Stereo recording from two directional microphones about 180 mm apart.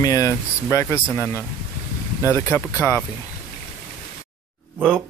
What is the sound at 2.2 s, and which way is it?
Speech, 15° left (ahead or behind).